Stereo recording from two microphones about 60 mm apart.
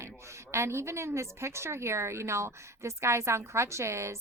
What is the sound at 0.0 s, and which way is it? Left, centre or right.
A woman's voice, right.